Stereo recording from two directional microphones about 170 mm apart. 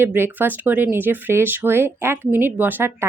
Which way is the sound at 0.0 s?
10° right (ahead or behind).